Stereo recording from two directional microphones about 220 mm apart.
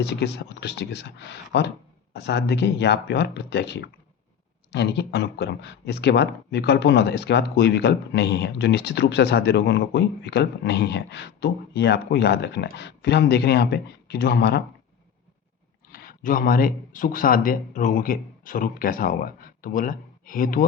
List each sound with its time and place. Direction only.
0.0 s speech: 50° left (ahead or behind)
15.9 s speech: 40° left (ahead or behind)